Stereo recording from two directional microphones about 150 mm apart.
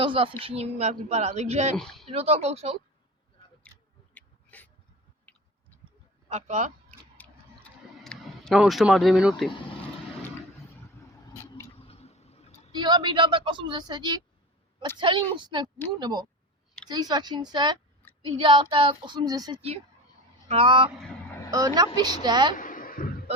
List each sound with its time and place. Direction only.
0.0 s speech: 35° right (ahead or behind)
1.7 s speech: centre (ahead or behind)
2.0 s speech: 45° right (ahead or behind)
4.1 s a sound: 10° left (ahead or behind)
6.2 s speech: 50° right (ahead or behind)
7.2 s tick-tock: 5° left (ahead or behind)
11.3 s a sound: 20° left (ahead or behind)
11.8 s tick-tock: 40° left (ahead or behind)
12.7 s a woman's voice: 30° right (ahead or behind)
20.5 s a woman's voice: 35° right (ahead or behind)
21.9 s speech: 30° right (ahead or behind)
22.5 s a sound: 65° left (ahead or behind)